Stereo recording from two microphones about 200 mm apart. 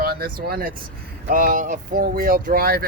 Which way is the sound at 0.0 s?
50° right (ahead or behind).